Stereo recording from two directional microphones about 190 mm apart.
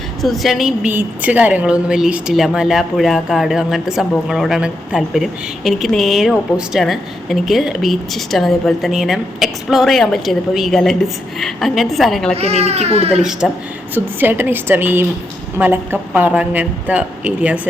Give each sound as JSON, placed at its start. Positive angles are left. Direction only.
{"t": 0.2, "sound": "speech", "side_deg": 0}
{"t": 12.4, "sound": "speech", "side_deg": -35}
{"t": 13.4, "sound": "speech", "side_deg": 0}
{"t": 13.9, "sound": "speech", "side_deg": -10}